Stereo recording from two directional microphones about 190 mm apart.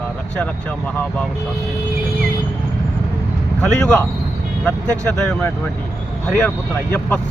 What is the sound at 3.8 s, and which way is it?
Speech, 5° left (ahead or behind).